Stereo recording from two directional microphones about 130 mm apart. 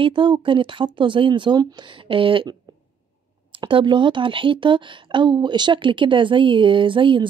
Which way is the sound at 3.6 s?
40° right (ahead or behind).